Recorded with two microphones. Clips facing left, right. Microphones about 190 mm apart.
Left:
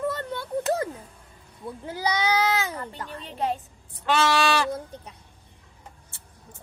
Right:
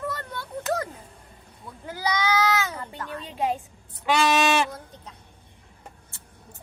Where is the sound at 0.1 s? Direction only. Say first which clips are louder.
Left 5 dB; 25° left (ahead or behind).